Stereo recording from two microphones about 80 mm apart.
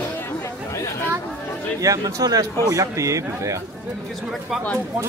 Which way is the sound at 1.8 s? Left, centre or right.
Right.